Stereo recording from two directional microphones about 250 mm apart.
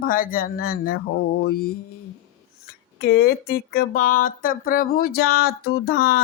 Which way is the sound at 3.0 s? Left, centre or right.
Left.